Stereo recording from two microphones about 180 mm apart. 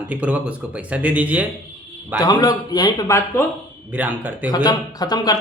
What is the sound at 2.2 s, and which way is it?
Speech, 20° left (ahead or behind).